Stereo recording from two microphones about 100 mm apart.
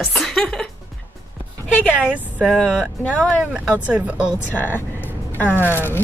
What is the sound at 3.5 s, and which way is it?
Speech, 15° right (ahead or behind).